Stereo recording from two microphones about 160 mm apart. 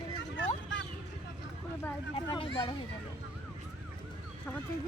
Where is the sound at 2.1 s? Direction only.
30° left (ahead or behind).